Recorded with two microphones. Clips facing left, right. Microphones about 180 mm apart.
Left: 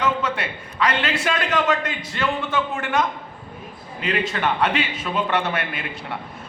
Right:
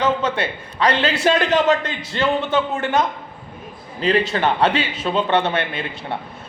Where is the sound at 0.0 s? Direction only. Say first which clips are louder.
Right 4 dB; 25° right (ahead or behind).